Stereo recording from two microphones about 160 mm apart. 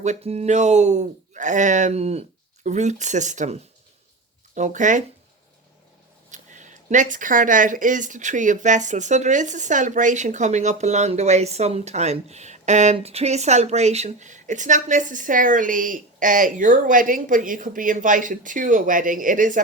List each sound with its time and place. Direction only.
0.0 s speech: 45° right (ahead or behind)
6.3 s speech: 50° right (ahead or behind)